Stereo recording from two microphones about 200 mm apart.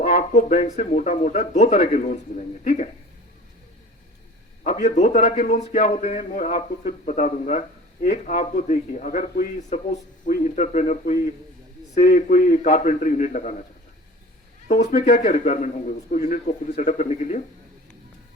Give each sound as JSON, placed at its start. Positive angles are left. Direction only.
{"t": 0.0, "sound": "a man's voice", "side_deg": 35}
{"t": 4.6, "sound": "a man's voice", "side_deg": 35}
{"t": 14.7, "sound": "a man's voice", "side_deg": 40}